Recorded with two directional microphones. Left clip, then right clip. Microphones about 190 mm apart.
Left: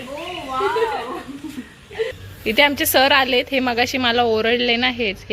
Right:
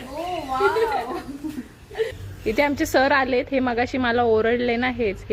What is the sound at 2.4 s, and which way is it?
A woman's voice, 5° right (ahead or behind).